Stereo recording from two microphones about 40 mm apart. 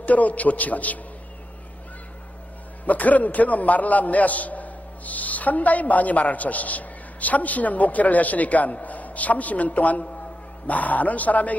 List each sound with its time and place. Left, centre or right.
0.0 s a man's voice: left
2.9 s a man's voice: left